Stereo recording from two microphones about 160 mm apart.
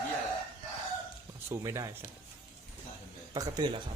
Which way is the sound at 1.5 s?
20° right (ahead or behind).